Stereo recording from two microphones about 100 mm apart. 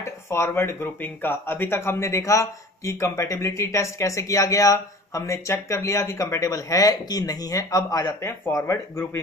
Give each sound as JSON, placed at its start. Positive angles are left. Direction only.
{"t": 0.0, "sound": "speech", "side_deg": 25}